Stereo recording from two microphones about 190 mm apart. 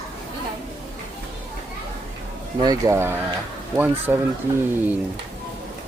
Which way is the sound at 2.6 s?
20° right (ahead or behind).